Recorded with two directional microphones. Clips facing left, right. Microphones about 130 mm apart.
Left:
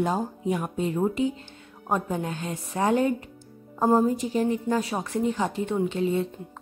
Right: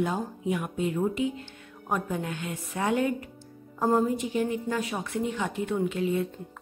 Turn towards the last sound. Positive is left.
turn(degrees=30)  # may be behind; listen again after turning